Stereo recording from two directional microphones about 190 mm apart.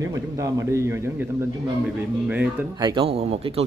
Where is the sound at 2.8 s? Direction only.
25° right (ahead or behind).